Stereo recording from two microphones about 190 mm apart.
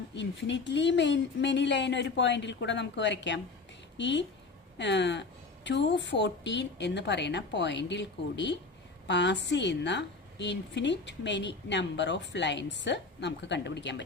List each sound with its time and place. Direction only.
0.1 s a woman's voice: 70° left (ahead or behind)